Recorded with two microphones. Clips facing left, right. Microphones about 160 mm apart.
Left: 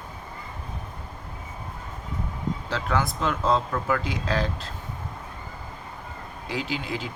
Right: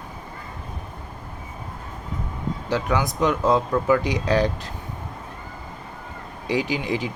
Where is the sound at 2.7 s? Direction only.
15° right (ahead or behind).